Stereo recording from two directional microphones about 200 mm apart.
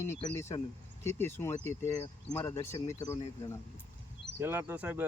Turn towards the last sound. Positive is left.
turn(degrees=-5)  # may be behind; listen again after turning